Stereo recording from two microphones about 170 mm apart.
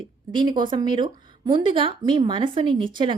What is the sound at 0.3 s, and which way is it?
Speech, 25° right (ahead or behind).